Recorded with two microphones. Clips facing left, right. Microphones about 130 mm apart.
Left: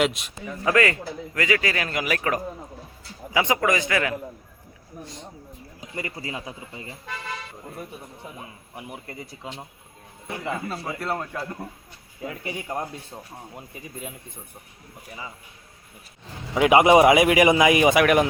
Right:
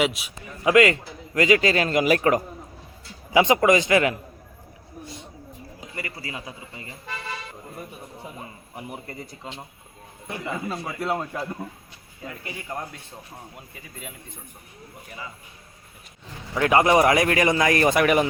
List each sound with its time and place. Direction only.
0.0 s a man's voice: 5° right (ahead or behind)
0.6 s speech: 20° right (ahead or behind)
5.9 s a man's voice: 25° left (ahead or behind)
7.8 s a man's voice: centre (ahead or behind)
11.1 s speech: 10° right (ahead or behind)
12.2 s a man's voice: 15° left (ahead or behind)
16.6 s a man's voice: 15° left (ahead or behind); by 18.3 s centre (ahead or behind)